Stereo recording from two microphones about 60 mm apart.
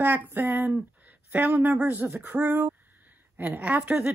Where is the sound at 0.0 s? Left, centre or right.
Right.